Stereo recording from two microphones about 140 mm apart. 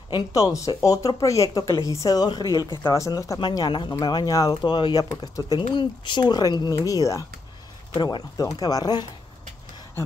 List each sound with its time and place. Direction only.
0.1 s speech: 25° left (ahead or behind)